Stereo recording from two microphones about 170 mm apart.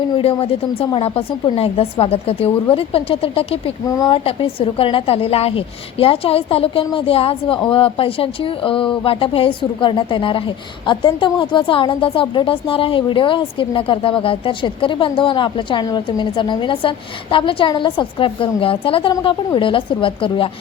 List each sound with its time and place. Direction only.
0.2 s a woman's voice: 35° left (ahead or behind)
3.8 s a woman's voice: 20° left (ahead or behind)
4.2 s a woman's voice: 35° left (ahead or behind)